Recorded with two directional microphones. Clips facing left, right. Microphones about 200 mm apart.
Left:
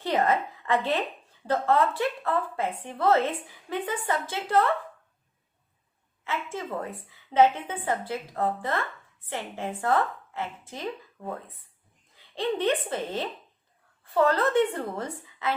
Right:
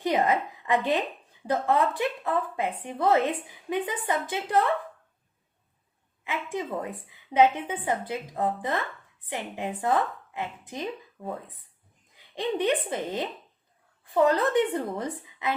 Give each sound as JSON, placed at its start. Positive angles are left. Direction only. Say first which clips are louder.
{"t": 0.0, "sound": "a woman's voice", "louder": "even", "side_deg": -15}
{"t": 6.2, "sound": "a woman's voice", "louder": "right 1 dB", "side_deg": -15}